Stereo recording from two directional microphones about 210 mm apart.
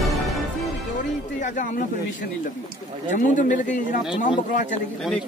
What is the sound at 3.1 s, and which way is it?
Speech, 35° left (ahead or behind).